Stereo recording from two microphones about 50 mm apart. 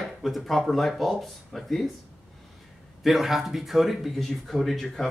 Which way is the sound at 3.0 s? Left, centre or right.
Centre.